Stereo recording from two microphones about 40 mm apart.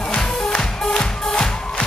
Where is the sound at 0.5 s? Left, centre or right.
Left.